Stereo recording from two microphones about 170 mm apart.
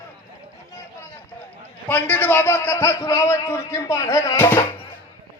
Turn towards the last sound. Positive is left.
turn(degrees=10)  # may be behind; listen again after turning